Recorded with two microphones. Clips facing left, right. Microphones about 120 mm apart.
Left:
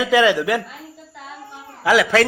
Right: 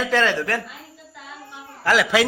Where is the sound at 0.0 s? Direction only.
10° left (ahead or behind).